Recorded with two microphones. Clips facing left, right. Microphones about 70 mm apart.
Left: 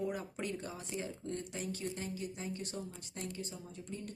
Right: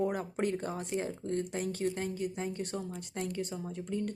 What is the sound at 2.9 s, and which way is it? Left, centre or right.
Speech, right.